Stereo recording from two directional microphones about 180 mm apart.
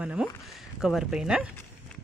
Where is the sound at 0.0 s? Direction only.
5° right (ahead or behind).